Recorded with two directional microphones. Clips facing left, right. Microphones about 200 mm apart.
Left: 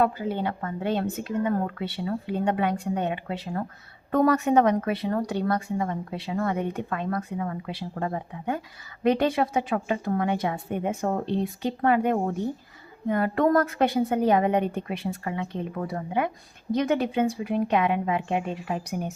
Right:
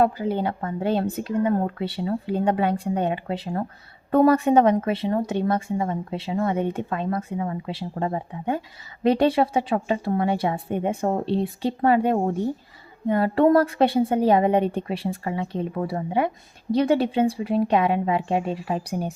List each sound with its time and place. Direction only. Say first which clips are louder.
0.0 s a woman's voice: right 3 dB; 35° right (ahead or behind)